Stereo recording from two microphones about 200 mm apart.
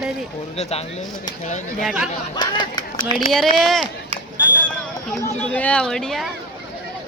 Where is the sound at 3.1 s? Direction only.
Centre (ahead or behind).